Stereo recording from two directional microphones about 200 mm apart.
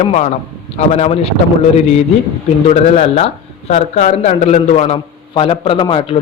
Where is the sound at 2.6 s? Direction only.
30° left (ahead or behind).